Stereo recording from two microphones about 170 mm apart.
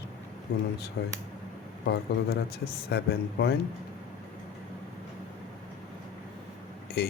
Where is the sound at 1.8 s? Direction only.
80° left.